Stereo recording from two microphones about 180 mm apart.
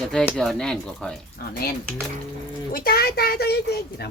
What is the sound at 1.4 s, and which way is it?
Speech, 60° left (ahead or behind).